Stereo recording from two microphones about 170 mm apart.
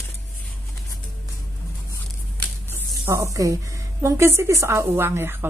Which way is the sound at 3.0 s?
15° right (ahead or behind).